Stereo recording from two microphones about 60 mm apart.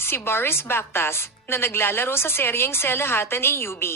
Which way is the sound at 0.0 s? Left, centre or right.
Left.